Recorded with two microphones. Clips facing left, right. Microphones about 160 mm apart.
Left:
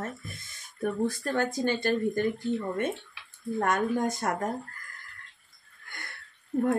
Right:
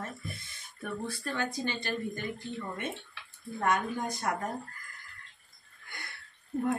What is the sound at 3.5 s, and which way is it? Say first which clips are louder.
Speech: left 4 dB; 50° left (ahead or behind).